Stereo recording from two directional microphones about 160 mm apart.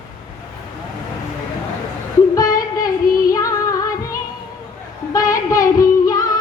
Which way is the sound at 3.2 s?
20° left (ahead or behind).